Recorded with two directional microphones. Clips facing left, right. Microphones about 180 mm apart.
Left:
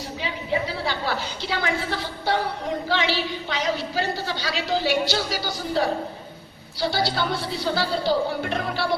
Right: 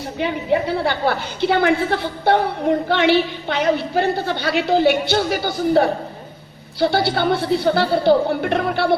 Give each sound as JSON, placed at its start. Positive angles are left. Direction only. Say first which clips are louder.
{"t": 0.2, "sound": "a woman's voice", "louder": "right 8 dB", "side_deg": -60}